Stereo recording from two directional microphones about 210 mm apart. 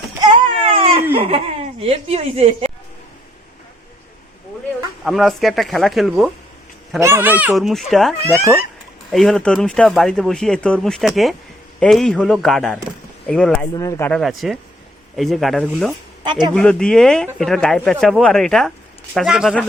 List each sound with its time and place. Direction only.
0.2 s baby cry: 20° right (ahead or behind)
1.1 s speech: 25° right (ahead or behind)
5.0 s speech: centre (ahead or behind)
7.0 s speech: 10° right (ahead or behind)
16.2 s speech: 20° right (ahead or behind)
16.6 s speech: 5° left (ahead or behind)